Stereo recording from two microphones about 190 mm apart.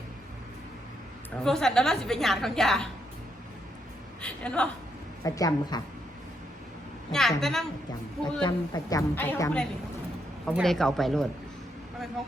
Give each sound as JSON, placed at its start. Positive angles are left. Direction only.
{"t": 1.5, "sound": "a woman's voice", "side_deg": 0}
{"t": 4.2, "sound": "a woman's voice", "side_deg": 5}
{"t": 5.2, "sound": "a woman's voice", "side_deg": 20}
{"t": 7.1, "sound": "a woman's voice", "side_deg": 0}
{"t": 8.4, "sound": "a woman's voice", "side_deg": 20}